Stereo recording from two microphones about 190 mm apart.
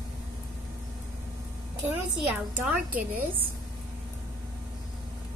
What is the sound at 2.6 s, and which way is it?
Speech, 10° right (ahead or behind).